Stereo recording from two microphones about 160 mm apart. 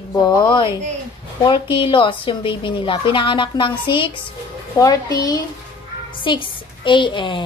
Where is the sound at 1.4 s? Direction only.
30° left (ahead or behind).